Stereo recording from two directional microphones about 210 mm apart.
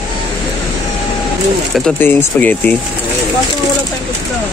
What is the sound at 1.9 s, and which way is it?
Speech, 10° left (ahead or behind).